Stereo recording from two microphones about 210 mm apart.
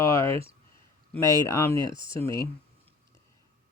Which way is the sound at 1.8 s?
25° right (ahead or behind).